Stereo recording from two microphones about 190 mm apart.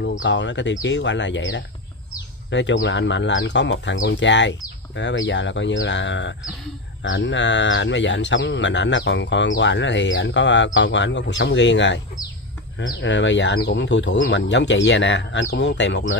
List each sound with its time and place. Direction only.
0.2 s speech: 70° left (ahead or behind)